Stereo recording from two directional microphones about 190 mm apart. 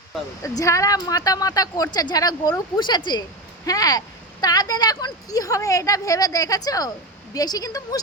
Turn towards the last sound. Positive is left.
turn(degrees=20)  # may be behind; listen again after turning